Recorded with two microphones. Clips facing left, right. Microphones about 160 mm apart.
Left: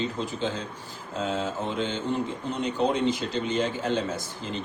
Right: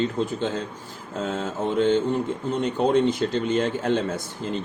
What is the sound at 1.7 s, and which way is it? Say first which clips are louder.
Speech: right 10 dB; 50° right (ahead or behind).